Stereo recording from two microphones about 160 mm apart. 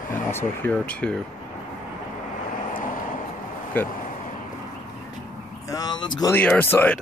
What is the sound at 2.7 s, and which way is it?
Vehicle, 55° left (ahead or behind).